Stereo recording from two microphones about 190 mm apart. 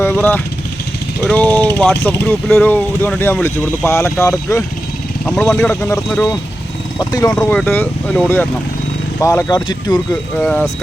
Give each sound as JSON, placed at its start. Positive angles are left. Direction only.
{"t": 0.0, "sound": "speech", "side_deg": 10}
{"t": 7.3, "sound": "speech", "side_deg": 10}
{"t": 10.3, "sound": "speech", "side_deg": 5}